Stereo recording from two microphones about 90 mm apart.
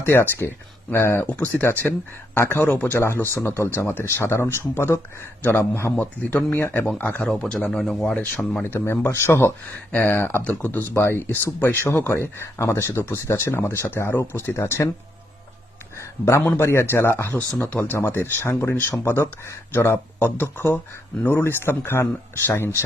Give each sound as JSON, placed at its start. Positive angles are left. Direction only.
{"t": 0.0, "sound": "speech", "side_deg": 25}
{"t": 8.6, "sound": "speech", "side_deg": 25}
{"t": 16.0, "sound": "speech", "side_deg": 30}